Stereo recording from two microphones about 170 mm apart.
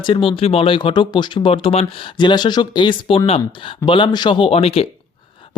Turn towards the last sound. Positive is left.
turn(degrees=35)  # may be behind; listen again after turning